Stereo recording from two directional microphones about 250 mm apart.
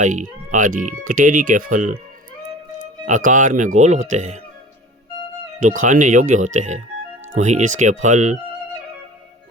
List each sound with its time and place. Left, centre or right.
0.0 s speech: right
3.1 s speech: right
5.8 s speech: right